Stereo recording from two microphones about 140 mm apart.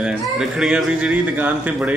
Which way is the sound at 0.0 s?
5° right (ahead or behind).